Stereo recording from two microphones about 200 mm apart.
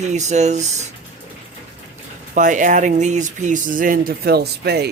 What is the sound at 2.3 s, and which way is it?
Speech, 40° right (ahead or behind).